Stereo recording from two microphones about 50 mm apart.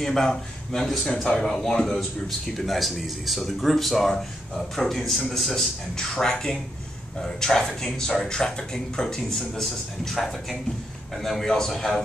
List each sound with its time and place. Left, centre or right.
0.0 s speech: centre